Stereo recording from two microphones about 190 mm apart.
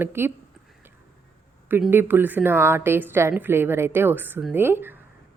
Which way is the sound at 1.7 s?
10° right (ahead or behind).